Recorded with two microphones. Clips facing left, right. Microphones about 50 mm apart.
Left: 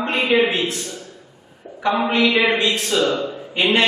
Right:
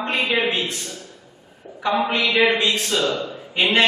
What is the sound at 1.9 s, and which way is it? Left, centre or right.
A man's voice, centre.